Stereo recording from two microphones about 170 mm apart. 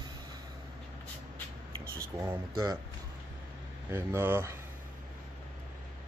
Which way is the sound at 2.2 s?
20° right (ahead or behind).